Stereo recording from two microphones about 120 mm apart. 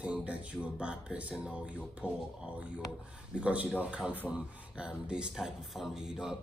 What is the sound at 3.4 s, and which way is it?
Speech, 10° right (ahead or behind).